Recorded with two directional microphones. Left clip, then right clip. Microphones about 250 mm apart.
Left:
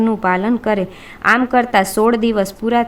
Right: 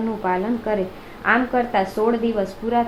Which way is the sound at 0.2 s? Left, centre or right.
Left.